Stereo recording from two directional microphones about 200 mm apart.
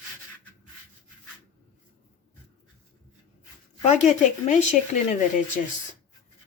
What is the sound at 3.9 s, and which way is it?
Speech, 40° left (ahead or behind).